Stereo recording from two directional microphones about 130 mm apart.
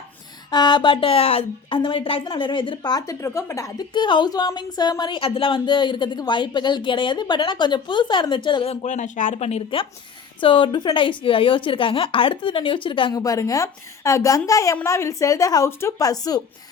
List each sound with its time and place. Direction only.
0.5 s speech: 35° left (ahead or behind)
3.9 s speech: 35° left (ahead or behind); by 9.4 s 75° left (ahead or behind)
9.4 s speech: 50° left (ahead or behind)
13.2 s a woman's voice: 25° left (ahead or behind)